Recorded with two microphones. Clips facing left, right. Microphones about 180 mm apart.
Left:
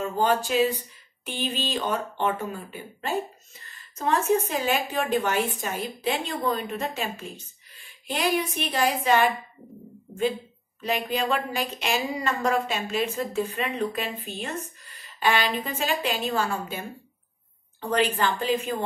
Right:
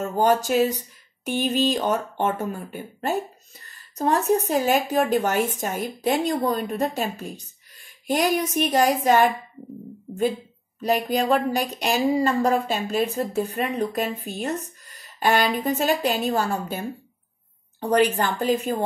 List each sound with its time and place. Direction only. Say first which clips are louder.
0.0 s a woman's voice: right 3 dB; 45° right (ahead or behind)
10.8 s a woman's voice: right 5 dB; 40° right (ahead or behind)